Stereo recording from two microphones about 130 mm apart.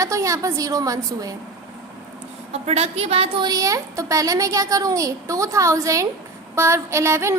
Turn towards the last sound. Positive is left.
turn(degrees=-20)  # may be behind; listen again after turning